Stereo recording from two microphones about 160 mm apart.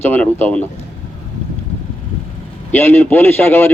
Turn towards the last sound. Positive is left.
turn(degrees=15)  # may be behind; listen again after turning